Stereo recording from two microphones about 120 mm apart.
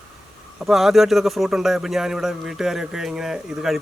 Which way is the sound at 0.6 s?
Centre (ahead or behind).